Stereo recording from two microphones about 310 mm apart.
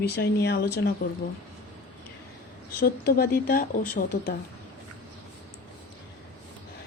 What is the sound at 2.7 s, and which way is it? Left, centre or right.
A woman's voice, left.